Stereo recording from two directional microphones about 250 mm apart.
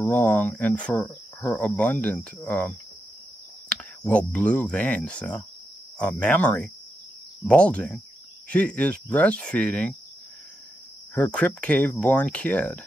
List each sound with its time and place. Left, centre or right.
0.0 s cricket: centre
3.6 s speech: centre
11.1 s speech: centre